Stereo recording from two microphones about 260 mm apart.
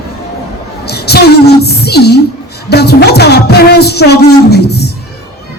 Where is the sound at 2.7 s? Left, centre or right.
Left.